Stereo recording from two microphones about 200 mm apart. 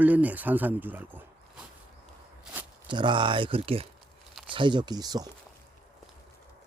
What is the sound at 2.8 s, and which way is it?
Speech, 25° right (ahead or behind).